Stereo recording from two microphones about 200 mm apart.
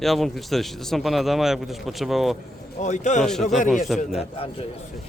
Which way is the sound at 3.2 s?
Centre (ahead or behind).